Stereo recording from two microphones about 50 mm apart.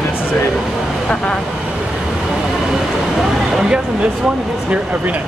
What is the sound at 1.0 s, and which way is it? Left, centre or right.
Speech, centre.